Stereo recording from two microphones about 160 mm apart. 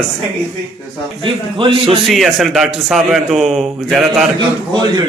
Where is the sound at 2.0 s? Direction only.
Centre (ahead or behind).